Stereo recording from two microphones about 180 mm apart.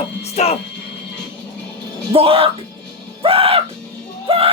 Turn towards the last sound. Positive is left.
turn(degrees=-30)  # may be behind; listen again after turning